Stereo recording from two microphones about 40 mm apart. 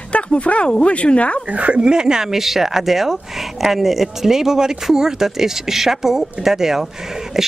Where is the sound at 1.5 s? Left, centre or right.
Right.